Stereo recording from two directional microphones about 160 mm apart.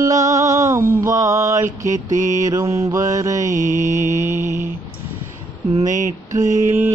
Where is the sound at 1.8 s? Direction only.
50° right (ahead or behind).